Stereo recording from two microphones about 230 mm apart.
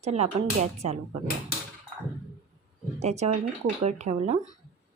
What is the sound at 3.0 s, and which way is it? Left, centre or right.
Speech, right.